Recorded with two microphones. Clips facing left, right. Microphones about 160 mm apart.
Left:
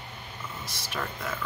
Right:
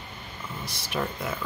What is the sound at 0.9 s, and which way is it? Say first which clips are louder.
Speech: right 4 dB; 15° right (ahead or behind).